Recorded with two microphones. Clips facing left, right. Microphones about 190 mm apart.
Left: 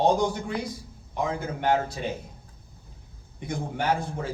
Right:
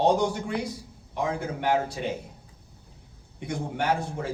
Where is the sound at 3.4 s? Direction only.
70° right (ahead or behind).